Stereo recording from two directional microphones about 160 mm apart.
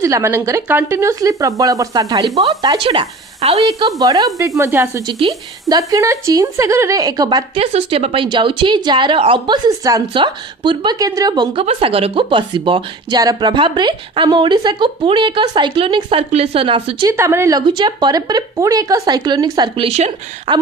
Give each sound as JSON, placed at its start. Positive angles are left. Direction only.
{"t": 0.0, "sound": "a woman's voice", "side_deg": -20}
{"t": 3.8, "sound": "a woman's voice", "side_deg": -20}
{"t": 7.5, "sound": "speech", "side_deg": -40}
{"t": 9.6, "sound": "a woman's voice", "side_deg": -20}
{"t": 11.6, "sound": "speech", "side_deg": -35}
{"t": 17.1, "sound": "a woman's voice", "side_deg": -20}